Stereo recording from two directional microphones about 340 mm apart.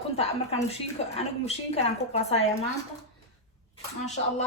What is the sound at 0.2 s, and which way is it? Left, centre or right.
Speech, centre.